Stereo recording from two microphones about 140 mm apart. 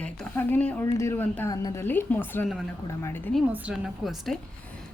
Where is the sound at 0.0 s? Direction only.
10° left (ahead or behind).